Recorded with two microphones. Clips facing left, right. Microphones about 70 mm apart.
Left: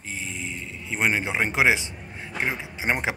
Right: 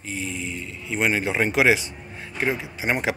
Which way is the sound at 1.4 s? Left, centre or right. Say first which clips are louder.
Right 2 dB; left.